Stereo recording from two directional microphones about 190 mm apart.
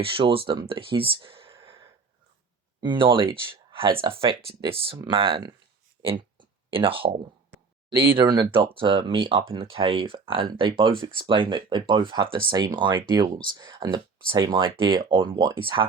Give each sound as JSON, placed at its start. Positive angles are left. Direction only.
{"t": 0.0, "sound": "speech", "side_deg": -30}
{"t": 2.8, "sound": "speech", "side_deg": -25}
{"t": 3.8, "sound": "speech", "side_deg": -15}
{"t": 4.2, "sound": "speech", "side_deg": -30}
{"t": 6.0, "sound": "a sound", "side_deg": -25}
{"t": 7.9, "sound": "speech", "side_deg": -25}